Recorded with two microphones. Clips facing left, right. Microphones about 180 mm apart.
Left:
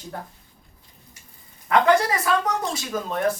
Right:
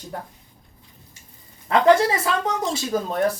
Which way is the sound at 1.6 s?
25° right (ahead or behind).